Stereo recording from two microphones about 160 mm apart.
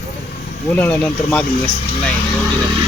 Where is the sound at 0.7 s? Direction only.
10° left (ahead or behind).